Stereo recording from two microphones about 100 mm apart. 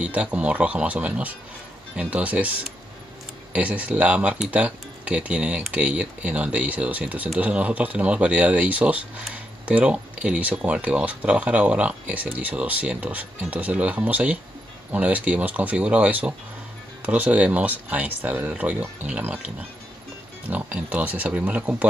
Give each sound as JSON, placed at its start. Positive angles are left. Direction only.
{"t": 0.0, "sound": "speech", "side_deg": -15}